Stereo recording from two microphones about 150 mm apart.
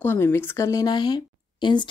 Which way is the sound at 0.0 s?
15° left (ahead or behind).